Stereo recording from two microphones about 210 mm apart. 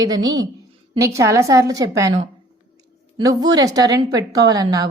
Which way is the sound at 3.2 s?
20° right (ahead or behind).